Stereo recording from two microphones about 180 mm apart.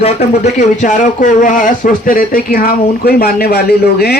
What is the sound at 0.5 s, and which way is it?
Speech, 45° left (ahead or behind).